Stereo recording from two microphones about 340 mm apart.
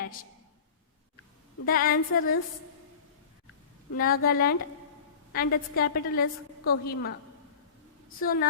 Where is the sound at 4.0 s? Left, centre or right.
Left.